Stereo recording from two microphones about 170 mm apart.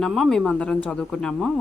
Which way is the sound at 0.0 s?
Centre (ahead or behind).